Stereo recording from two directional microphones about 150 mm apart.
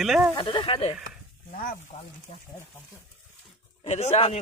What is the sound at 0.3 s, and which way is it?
Speech, 35° left (ahead or behind).